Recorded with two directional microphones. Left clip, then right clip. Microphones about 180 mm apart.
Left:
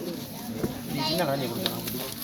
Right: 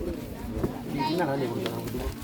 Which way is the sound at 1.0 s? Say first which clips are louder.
Even; 20° left (ahead or behind).